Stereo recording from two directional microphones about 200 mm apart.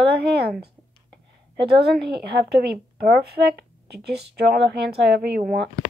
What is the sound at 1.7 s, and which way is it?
Speech, 55° right (ahead or behind).